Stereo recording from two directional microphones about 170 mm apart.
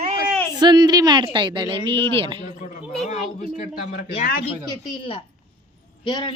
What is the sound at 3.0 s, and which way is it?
A woman's voice, 45° left (ahead or behind).